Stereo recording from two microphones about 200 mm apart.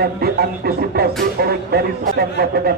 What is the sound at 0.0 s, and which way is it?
Speech, 50° right (ahead or behind).